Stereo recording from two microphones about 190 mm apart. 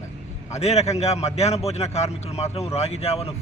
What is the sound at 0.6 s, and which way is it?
A man's voice, 35° left (ahead or behind).